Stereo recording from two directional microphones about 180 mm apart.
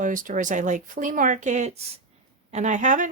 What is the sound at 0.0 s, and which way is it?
Speech, 45° right (ahead or behind).